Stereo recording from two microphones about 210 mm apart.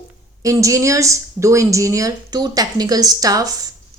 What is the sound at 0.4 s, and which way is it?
A woman's voice, 15° right (ahead or behind).